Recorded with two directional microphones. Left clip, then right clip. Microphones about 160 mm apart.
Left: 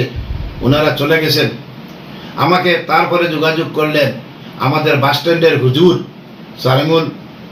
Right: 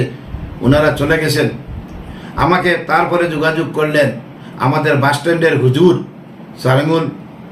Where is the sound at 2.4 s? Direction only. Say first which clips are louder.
Left 1 dB; 15° right (ahead or behind).